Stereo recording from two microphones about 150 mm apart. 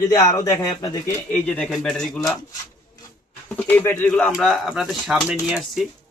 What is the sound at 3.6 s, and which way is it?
Speech, 10° left (ahead or behind).